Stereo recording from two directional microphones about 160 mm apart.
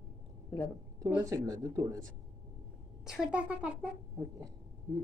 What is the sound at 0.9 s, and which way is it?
A woman's voice, 20° right (ahead or behind).